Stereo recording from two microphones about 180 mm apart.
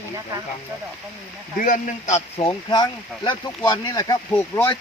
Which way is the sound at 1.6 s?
45° left (ahead or behind).